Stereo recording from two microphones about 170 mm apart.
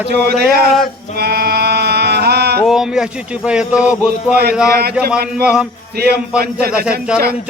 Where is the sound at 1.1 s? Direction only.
65° right (ahead or behind).